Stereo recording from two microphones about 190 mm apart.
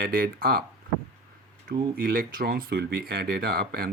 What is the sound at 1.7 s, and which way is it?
Speech, 55° right (ahead or behind).